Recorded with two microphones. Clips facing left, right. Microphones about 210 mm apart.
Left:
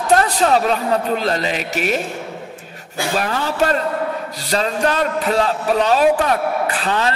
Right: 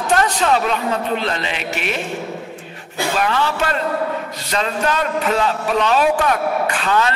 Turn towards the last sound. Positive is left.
turn(degrees=35)  # may be behind; listen again after turning